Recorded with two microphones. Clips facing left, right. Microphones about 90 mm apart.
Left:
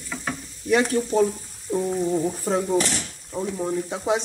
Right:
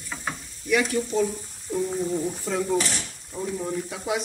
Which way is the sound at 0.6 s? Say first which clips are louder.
Left 3 dB; 35° left (ahead or behind).